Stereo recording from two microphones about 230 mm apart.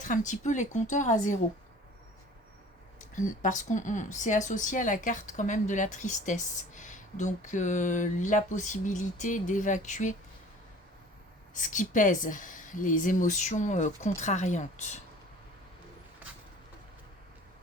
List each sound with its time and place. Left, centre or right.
0.0 s speech: left
3.2 s speech: left
11.5 s speech: left
16.2 s vehicle: centre